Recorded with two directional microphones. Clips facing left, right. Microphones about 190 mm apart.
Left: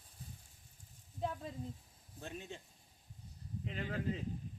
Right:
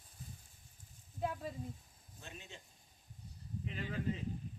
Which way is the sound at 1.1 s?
5° right (ahead or behind).